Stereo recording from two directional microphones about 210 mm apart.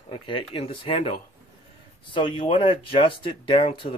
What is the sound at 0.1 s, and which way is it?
Speech, 25° left (ahead or behind).